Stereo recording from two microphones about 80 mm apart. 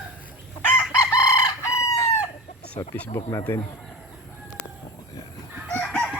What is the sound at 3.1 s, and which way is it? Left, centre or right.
Speech, left.